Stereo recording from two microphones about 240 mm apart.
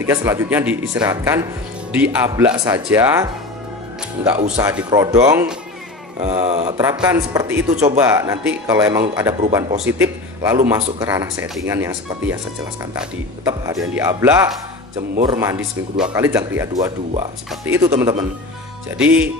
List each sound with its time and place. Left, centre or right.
0.0 s speech: centre
6.3 s speech: right
6.8 s a man's voice: centre
13.4 s speech: centre